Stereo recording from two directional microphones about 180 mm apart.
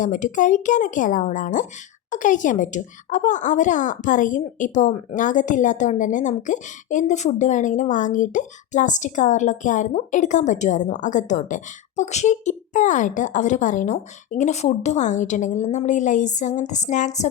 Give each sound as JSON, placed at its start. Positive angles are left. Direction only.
{"t": 0.0, "sound": "a woman's voice", "side_deg": 45}